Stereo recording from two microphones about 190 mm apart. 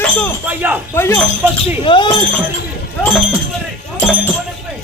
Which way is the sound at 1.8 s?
25° left (ahead or behind).